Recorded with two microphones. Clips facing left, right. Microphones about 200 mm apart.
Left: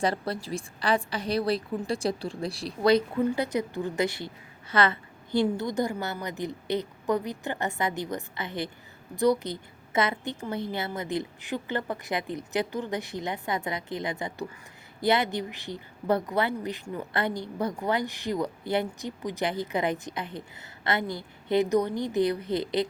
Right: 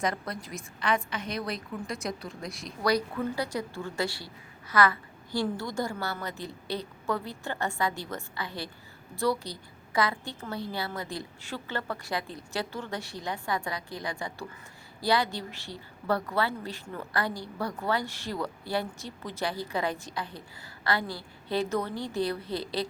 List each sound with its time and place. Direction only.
0.0 s a woman's voice: 30° left (ahead or behind)